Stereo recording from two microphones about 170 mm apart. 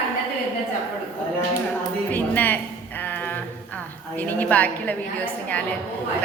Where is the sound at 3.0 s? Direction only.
10° left (ahead or behind).